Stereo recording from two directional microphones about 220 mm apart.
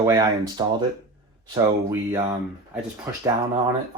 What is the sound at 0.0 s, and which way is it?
Speech, 15° right (ahead or behind).